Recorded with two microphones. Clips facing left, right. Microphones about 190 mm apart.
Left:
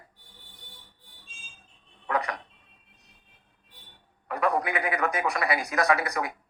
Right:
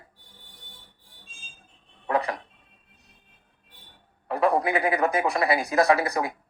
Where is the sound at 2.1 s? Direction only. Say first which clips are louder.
Right 3 dB; 30° right (ahead or behind).